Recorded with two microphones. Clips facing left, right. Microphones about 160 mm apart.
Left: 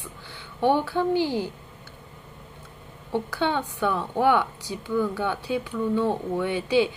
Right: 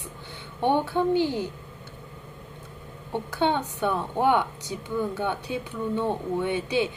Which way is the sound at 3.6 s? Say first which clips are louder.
Left 1 dB; 20° right (ahead or behind).